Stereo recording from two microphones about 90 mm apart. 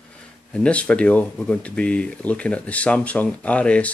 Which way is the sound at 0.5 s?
10° left (ahead or behind).